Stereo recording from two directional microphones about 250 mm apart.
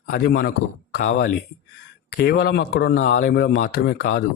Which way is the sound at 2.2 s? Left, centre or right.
Left.